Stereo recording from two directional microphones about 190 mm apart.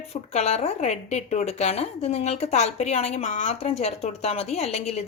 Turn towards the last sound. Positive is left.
turn(degrees=35)  # may be behind; listen again after turning